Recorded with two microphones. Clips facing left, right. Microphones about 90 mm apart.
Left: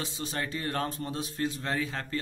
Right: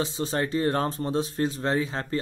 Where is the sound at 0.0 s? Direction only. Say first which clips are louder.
Right 7 dB; 30° right (ahead or behind).